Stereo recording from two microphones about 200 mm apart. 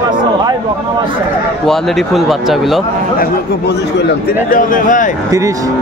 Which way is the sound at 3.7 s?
55° left (ahead or behind).